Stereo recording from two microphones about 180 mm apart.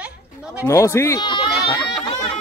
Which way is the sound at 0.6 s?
15° left (ahead or behind).